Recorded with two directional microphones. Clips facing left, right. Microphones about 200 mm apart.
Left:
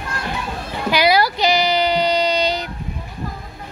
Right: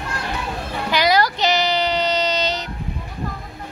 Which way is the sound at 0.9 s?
10° left (ahead or behind).